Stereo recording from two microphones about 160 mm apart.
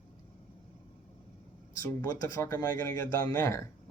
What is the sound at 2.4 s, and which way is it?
Speech, 20° left (ahead or behind).